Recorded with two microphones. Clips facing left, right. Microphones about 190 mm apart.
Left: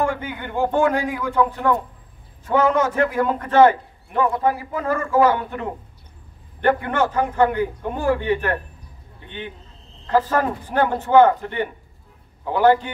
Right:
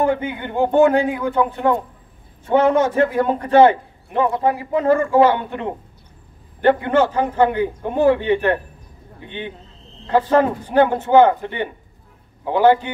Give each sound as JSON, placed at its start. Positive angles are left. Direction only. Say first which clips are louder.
{"t": 0.0, "sound": "a man's voice", "louder": "right 4 dB", "side_deg": -25}
{"t": 10.0, "sound": "a man's voice", "louder": "right 4 dB", "side_deg": -25}